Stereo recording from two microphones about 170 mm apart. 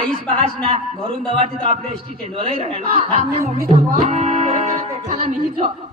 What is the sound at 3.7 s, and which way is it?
Music, 45° right (ahead or behind).